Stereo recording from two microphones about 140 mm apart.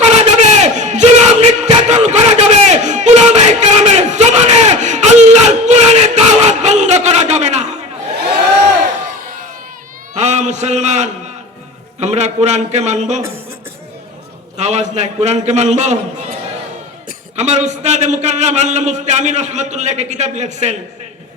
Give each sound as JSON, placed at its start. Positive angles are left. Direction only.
{"t": 0.0, "sound": "battle cry", "side_deg": -55}
{"t": 10.2, "sound": "a sound", "side_deg": -55}
{"t": 14.6, "sound": "a man's voice", "side_deg": -55}
{"t": 17.1, "sound": "a man's voice", "side_deg": -55}